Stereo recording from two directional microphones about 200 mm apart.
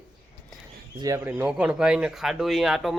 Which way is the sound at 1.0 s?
15° right (ahead or behind).